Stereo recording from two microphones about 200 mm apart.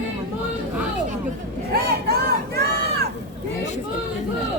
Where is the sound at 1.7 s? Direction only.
50° right (ahead or behind).